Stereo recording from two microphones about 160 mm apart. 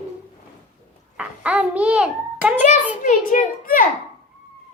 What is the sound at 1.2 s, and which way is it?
A child's voice, 5° right (ahead or behind).